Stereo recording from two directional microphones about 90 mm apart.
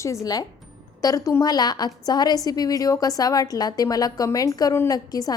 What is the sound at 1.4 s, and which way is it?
A woman's voice, 50° left (ahead or behind).